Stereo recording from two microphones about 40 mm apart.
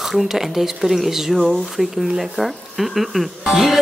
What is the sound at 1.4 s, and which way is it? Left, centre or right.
Music, centre.